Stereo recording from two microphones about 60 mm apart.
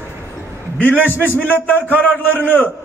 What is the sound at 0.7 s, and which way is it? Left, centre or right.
A man's voice, left.